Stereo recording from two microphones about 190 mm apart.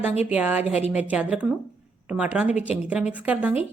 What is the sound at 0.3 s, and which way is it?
Speech, 5° right (ahead or behind).